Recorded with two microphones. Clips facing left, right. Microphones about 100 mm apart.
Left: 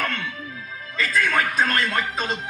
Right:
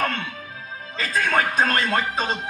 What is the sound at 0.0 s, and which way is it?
Music, 30° right (ahead or behind).